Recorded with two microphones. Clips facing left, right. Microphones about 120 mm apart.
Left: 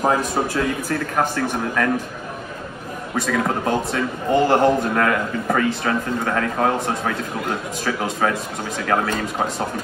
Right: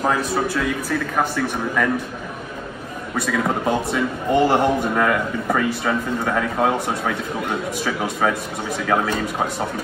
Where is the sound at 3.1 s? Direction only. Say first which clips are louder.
Even; 5° right (ahead or behind).